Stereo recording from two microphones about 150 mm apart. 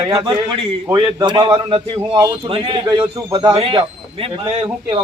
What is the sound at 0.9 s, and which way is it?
A man's voice, 30° right (ahead or behind).